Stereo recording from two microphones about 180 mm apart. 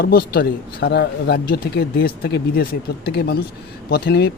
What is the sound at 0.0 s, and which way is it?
Speech, 60° left (ahead or behind).